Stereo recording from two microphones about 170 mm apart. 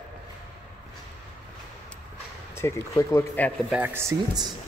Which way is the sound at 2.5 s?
15° left (ahead or behind).